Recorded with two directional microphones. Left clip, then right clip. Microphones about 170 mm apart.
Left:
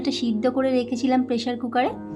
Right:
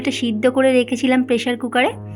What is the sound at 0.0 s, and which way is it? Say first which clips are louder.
A woman's voice: right 5 dB; 20° right (ahead or behind).